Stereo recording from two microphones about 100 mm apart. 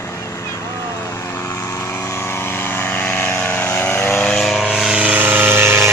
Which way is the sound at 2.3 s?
25° left (ahead or behind).